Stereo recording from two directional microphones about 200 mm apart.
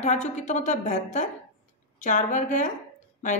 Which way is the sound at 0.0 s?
35° left (ahead or behind).